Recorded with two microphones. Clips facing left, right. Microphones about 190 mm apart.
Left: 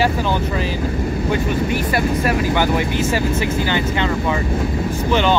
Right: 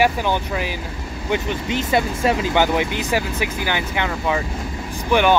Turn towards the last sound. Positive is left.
turn(degrees=-15)  # may be behind; listen again after turning